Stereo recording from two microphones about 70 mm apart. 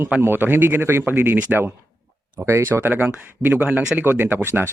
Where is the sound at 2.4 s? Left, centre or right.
Right.